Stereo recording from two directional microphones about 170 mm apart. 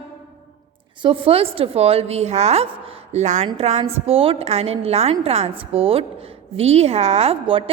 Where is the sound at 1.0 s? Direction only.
30° right (ahead or behind).